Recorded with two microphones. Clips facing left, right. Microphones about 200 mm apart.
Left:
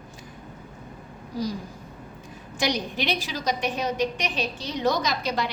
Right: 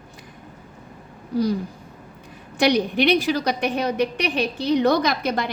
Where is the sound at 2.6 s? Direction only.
60° right (ahead or behind).